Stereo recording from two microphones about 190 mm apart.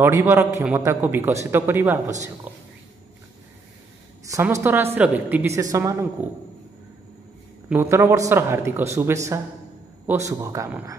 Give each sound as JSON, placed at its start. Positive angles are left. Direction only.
{"t": 0.0, "sound": "a man's voice", "side_deg": -15}
{"t": 2.5, "sound": "whispering", "side_deg": -10}
{"t": 4.3, "sound": "a man's voice", "side_deg": -15}
{"t": 7.7, "sound": "a man's voice", "side_deg": -15}